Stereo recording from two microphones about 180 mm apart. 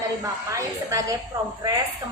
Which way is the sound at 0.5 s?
20° right (ahead or behind).